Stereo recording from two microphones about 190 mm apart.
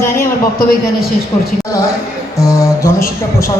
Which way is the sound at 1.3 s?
15° left (ahead or behind).